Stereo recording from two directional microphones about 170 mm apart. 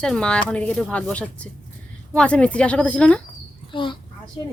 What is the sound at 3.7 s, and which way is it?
Speech, 30° left (ahead or behind).